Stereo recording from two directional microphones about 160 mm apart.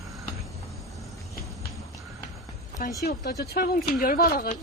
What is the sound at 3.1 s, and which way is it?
Speech, 80° left.